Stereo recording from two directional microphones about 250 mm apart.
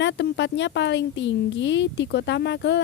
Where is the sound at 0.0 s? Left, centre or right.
Left.